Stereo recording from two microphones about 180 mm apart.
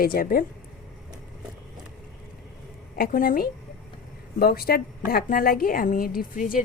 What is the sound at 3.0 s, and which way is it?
A woman's voice, 50° left (ahead or behind).